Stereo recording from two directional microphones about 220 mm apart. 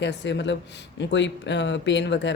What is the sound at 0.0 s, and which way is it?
Speech, 55° left (ahead or behind).